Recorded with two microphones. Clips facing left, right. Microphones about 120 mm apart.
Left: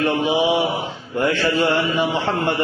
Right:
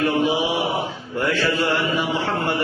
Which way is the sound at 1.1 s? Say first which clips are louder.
Left 2 dB; 20° left (ahead or behind).